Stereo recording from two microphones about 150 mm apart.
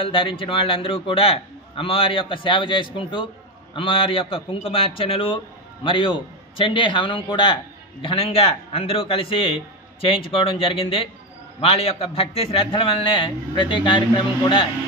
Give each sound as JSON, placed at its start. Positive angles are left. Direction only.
{"t": 0.0, "sound": "a man's voice", "side_deg": 35}